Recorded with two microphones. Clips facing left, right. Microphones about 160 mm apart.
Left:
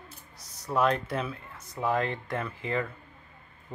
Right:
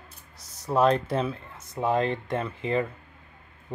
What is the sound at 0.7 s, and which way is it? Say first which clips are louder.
Speech: right 4 dB; 30° right (ahead or behind).